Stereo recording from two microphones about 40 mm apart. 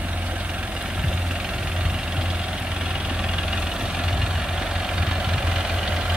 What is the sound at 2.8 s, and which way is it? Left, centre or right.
Vehicle, centre.